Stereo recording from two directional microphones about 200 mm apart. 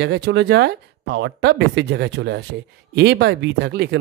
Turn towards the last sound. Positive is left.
turn(degrees=-55)  # may be behind; listen again after turning